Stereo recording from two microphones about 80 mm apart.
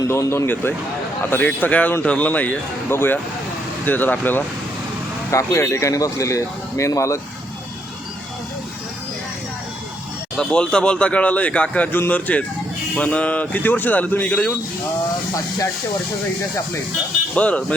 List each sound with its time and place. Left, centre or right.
0.1 s a man's voice: left
5.3 s a man's voice: left
10.3 s speech: centre
17.3 s speech: centre